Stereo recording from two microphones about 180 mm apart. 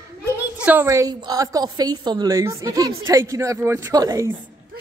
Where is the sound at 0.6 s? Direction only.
10° right (ahead or behind).